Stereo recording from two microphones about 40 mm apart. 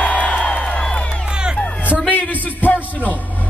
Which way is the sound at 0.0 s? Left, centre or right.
Left.